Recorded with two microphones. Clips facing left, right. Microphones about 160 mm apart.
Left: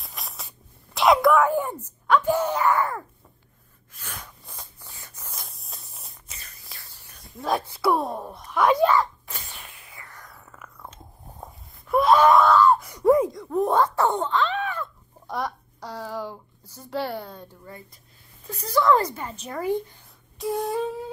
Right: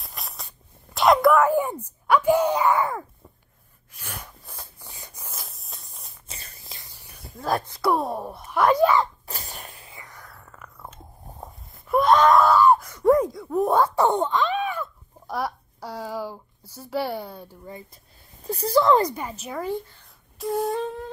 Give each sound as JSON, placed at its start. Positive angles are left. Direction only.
{"t": 0.0, "sound": "spray", "side_deg": 0}
{"t": 0.9, "sound": "speech", "side_deg": 0}
{"t": 1.6, "sound": "speech", "side_deg": -10}
{"t": 3.9, "sound": "a sound", "side_deg": -10}
{"t": 5.3, "sound": "a sound", "side_deg": 0}
{"t": 6.2, "sound": "a sound", "side_deg": -30}
{"t": 7.2, "sound": "speech", "side_deg": 0}
{"t": 9.3, "sound": "sneeze", "side_deg": -40}
{"t": 9.9, "sound": "a sound", "side_deg": -15}
{"t": 10.2, "sound": "biting", "side_deg": 0}
{"t": 13.0, "sound": "speech", "side_deg": 0}
{"t": 18.4, "sound": "speech", "side_deg": -35}
{"t": 18.9, "sound": "speech", "side_deg": -15}
{"t": 19.3, "sound": "speech", "side_deg": -5}